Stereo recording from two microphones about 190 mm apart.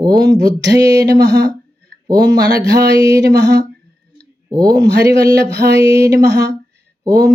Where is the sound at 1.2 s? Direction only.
65° right (ahead or behind).